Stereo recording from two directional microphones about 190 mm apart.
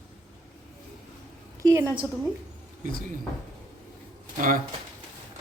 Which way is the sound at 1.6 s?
15° right (ahead or behind).